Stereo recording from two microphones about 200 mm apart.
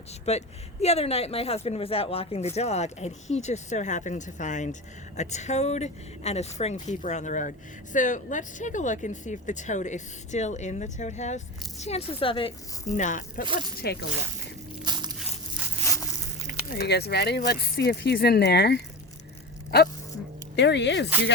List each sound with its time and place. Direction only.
0.3 s speech: 30° left (ahead or behind)
12.9 s speech: 40° left (ahead or behind)
13.7 s speech: 50° left (ahead or behind)
14.8 s a sound: 20° right (ahead or behind)
16.7 s speech: 55° left (ahead or behind)
20.6 s speech: 60° left (ahead or behind)